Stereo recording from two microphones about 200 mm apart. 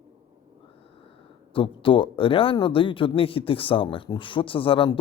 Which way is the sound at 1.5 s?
25° left (ahead or behind).